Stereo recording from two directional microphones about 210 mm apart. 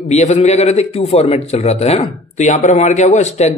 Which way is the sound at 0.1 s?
35° left (ahead or behind).